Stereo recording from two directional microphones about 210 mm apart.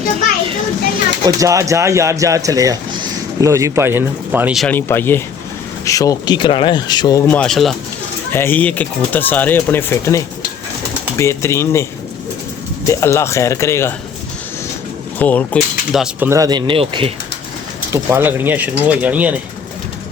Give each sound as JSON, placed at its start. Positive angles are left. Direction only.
{"t": 1.2, "sound": "speech", "side_deg": -15}
{"t": 12.9, "sound": "speech", "side_deg": 15}
{"t": 15.2, "sound": "speech", "side_deg": 5}
{"t": 15.9, "sound": "speech", "side_deg": -5}
{"t": 16.3, "sound": "speech", "side_deg": -20}
{"t": 17.9, "sound": "speech", "side_deg": -10}